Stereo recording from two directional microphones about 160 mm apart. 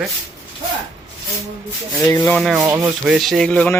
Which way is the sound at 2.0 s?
20° left (ahead or behind).